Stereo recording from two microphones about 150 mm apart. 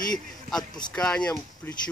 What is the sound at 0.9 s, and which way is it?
Speech, 5° left (ahead or behind).